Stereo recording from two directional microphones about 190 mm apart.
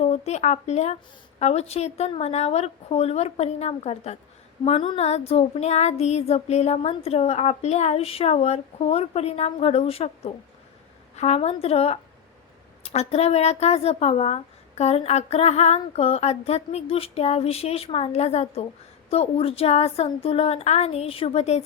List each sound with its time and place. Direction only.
0.0 s speech: 35° left (ahead or behind)